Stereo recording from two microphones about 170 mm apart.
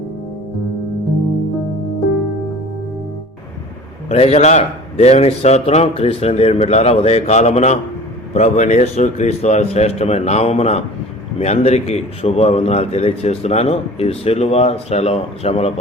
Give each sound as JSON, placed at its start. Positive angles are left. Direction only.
{"t": 4.1, "sound": "a man's voice", "side_deg": 40}